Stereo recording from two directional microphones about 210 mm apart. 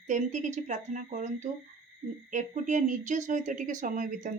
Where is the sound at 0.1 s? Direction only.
35° right (ahead or behind).